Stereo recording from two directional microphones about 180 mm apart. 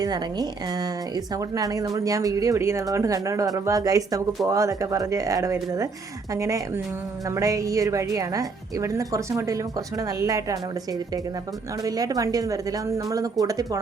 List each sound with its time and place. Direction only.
0.0 s speech: 20° right (ahead or behind)
11.8 s speech: 20° right (ahead or behind)